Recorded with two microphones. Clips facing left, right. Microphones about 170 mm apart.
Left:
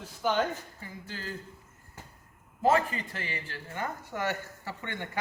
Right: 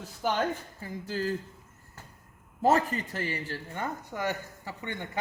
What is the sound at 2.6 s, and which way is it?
Speech, 40° right (ahead or behind).